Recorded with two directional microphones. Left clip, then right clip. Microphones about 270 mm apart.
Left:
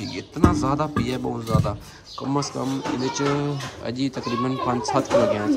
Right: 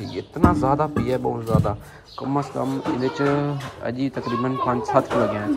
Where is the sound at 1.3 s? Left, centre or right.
Left.